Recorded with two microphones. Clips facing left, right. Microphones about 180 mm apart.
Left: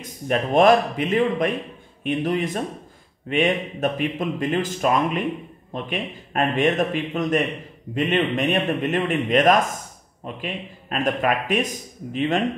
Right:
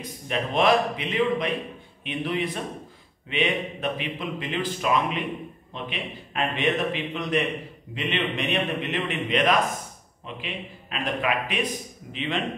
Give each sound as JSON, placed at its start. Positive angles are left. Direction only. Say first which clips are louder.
{"t": 0.0, "sound": "a man's voice", "louder": "left 5 dB", "side_deg": 45}